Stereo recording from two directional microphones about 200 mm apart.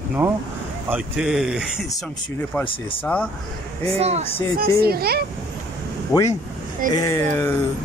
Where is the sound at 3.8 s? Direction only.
30° right (ahead or behind).